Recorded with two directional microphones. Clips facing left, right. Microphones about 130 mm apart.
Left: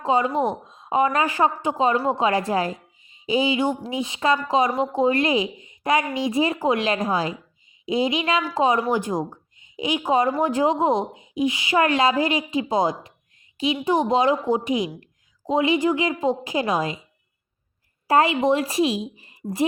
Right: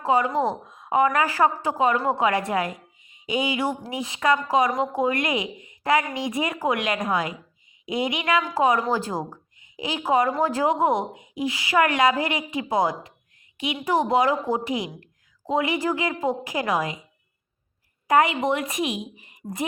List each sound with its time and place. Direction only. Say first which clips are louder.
0.0 s a woman's voice: left 1 dB; 25° left (ahead or behind)
9.6 s a sound: left 5 dB; 25° left (ahead or behind)
10.1 s a woman's voice: even; 25° left (ahead or behind)
18.1 s a woman's voice: left 2 dB; 30° left (ahead or behind)